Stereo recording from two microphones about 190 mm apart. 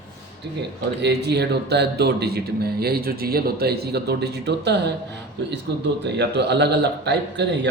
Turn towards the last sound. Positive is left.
turn(degrees=-65)  # may be behind; listen again after turning